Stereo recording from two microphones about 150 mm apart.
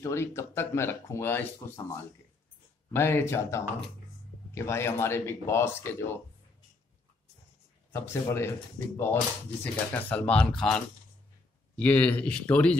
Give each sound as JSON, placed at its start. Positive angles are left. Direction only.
{"t": 0.0, "sound": "speech", "side_deg": 15}
{"t": 2.9, "sound": "speech", "side_deg": 15}
{"t": 7.9, "sound": "speech", "side_deg": 15}